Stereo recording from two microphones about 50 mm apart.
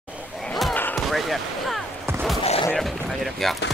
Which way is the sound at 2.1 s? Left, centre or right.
Right.